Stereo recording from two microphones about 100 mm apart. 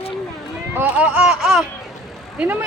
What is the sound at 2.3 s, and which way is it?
Speech, 20° right (ahead or behind).